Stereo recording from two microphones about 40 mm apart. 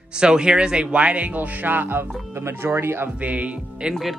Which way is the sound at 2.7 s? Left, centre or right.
Right.